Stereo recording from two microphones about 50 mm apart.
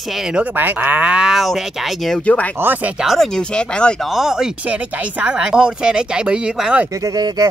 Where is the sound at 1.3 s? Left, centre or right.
Centre.